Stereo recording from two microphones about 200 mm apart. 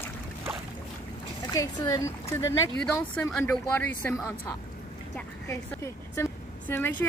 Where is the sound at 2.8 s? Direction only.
5° left (ahead or behind).